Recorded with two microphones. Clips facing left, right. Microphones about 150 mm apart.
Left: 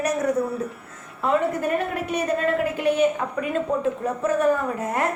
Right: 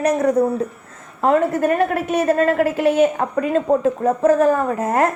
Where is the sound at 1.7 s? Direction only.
80° right.